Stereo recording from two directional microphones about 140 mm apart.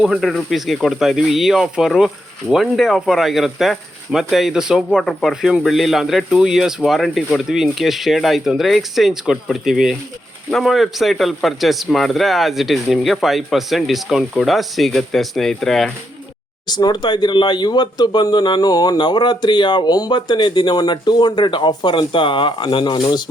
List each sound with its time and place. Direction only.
0.0 s speech: centre (ahead or behind)
16.6 s speech: 30° left (ahead or behind)